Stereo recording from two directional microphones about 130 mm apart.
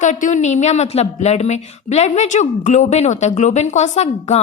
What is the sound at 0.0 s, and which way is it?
A woman's voice, 75° left (ahead or behind).